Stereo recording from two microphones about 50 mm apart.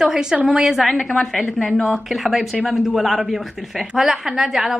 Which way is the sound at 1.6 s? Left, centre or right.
Centre.